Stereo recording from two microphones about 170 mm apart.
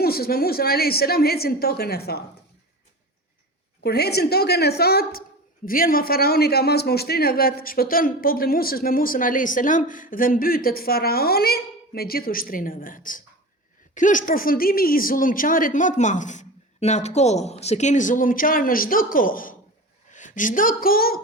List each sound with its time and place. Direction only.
0.0 s a man's voice: 65° left (ahead or behind)
3.8 s a woman's voice: 70° left (ahead or behind)